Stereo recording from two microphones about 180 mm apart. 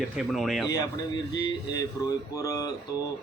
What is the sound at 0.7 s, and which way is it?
A man's voice, 20° left (ahead or behind).